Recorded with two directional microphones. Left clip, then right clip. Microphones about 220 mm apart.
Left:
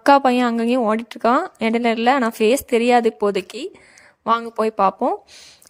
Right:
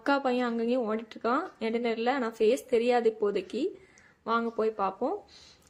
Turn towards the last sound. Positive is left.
turn(degrees=45)  # may be behind; listen again after turning